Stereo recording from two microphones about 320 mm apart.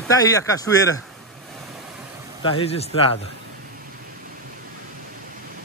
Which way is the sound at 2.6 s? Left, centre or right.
Centre.